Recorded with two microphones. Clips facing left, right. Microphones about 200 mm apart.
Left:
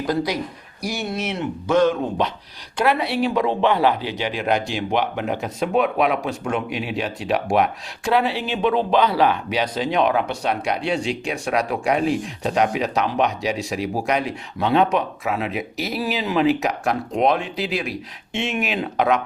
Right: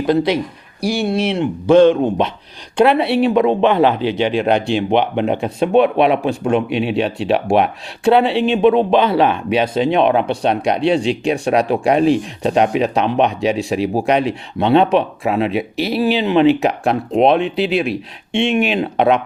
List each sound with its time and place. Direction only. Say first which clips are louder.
0.0 s speech: right 7 dB; 25° right (ahead or behind)